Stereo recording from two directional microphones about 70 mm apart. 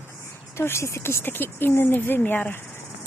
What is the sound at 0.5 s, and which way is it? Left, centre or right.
Speech, left.